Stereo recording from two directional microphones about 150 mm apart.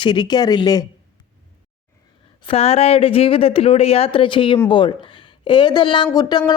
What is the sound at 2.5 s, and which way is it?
Speech, 40° left (ahead or behind).